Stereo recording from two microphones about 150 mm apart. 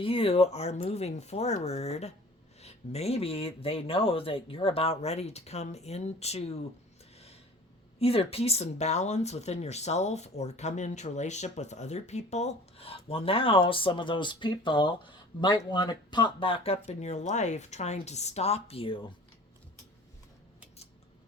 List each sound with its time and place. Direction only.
0.0 s speech: 40° left (ahead or behind)
7.9 s speech: 40° left (ahead or behind)